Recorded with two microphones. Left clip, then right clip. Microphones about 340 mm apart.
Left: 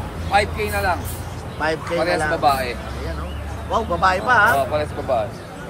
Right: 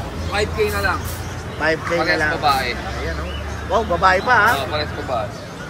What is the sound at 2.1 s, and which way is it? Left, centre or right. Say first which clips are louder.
Speech: even; left.